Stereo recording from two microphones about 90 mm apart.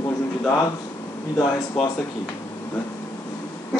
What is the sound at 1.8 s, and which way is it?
Speech, centre (ahead or behind).